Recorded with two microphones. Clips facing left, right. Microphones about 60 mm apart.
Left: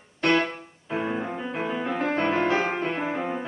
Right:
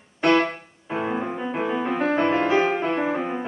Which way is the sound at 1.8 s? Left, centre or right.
Right.